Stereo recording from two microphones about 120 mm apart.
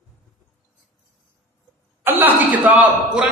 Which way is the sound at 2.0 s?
15° right (ahead or behind).